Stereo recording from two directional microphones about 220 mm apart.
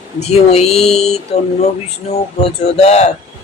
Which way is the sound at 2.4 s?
30° left (ahead or behind).